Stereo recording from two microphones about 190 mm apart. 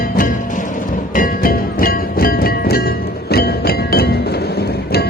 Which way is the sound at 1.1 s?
45° left (ahead or behind).